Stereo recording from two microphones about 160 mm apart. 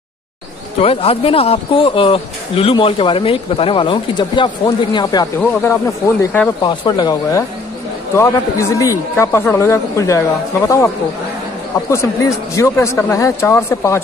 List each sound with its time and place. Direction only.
0.7 s a man's voice: 35° left (ahead or behind); by 6.5 s 10° left (ahead or behind)
6.6 s a man's voice: 25° left (ahead or behind)
11.9 s a man's voice: 20° left (ahead or behind)